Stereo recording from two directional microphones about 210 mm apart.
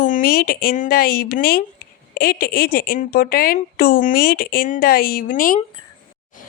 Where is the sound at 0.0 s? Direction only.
40° left (ahead or behind).